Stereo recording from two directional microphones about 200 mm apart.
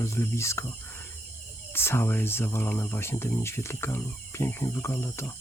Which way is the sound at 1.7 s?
10° left (ahead or behind).